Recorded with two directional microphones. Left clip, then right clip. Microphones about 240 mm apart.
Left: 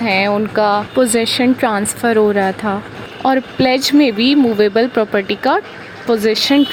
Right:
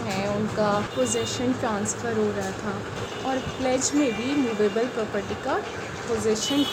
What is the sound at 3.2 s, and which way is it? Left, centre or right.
Speech, left.